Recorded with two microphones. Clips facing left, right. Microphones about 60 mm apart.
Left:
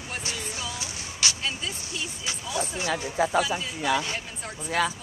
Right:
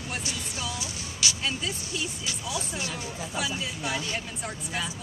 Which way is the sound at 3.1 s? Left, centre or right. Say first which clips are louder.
Left 10 dB; left.